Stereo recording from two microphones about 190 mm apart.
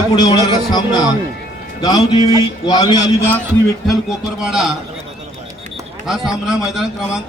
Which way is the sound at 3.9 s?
Centre (ahead or behind).